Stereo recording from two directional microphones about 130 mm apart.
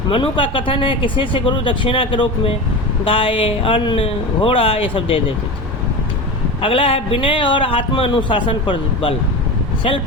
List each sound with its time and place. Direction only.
0.1 s speech: 40° left (ahead or behind)
6.6 s speech: 45° left (ahead or behind)